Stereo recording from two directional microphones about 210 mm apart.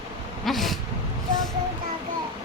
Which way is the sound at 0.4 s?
Centre (ahead or behind).